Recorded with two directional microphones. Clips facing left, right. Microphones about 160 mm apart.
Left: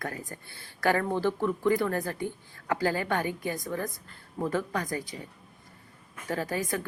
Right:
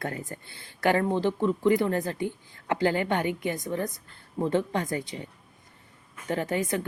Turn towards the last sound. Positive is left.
turn(degrees=-20)  # may be behind; listen again after turning